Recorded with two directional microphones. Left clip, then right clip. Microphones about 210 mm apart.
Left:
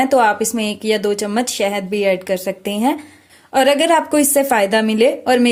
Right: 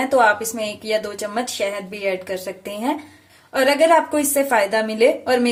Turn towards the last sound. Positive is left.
turn(degrees=40)  # may be behind; listen again after turning